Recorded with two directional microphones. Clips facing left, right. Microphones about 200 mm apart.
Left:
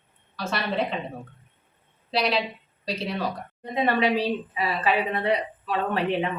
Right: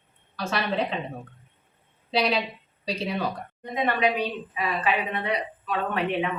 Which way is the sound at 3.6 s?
30° left (ahead or behind).